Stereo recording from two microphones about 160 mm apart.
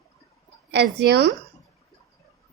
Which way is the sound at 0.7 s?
90° right.